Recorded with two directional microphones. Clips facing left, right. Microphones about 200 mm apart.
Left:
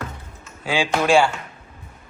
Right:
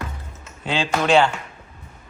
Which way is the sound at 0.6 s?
10° left (ahead or behind).